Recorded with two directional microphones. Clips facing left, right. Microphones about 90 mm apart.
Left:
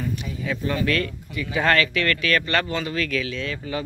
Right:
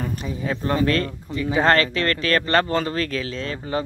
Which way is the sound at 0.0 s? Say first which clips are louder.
Right 1 dB; 40° right (ahead or behind).